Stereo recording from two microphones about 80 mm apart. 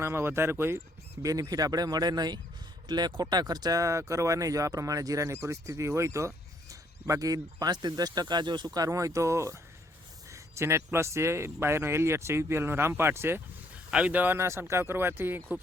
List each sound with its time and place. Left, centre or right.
0.0 s speech: right
1.2 s speech: right
2.8 s speech: right
13.9 s speech: centre
14.3 s speech: right